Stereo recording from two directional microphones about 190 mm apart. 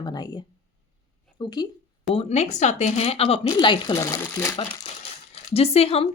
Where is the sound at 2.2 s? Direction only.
35° left (ahead or behind).